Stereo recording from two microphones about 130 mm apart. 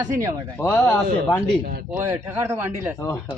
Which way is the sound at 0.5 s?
10° left (ahead or behind).